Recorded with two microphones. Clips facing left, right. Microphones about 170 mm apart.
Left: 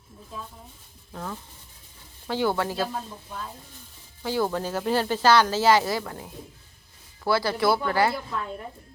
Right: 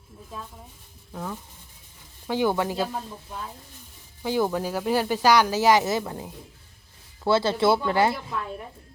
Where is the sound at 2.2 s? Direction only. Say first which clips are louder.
Right 1 dB; 15° right (ahead or behind).